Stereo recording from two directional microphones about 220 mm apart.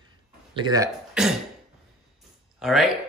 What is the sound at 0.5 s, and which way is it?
Speech, 20° right (ahead or behind).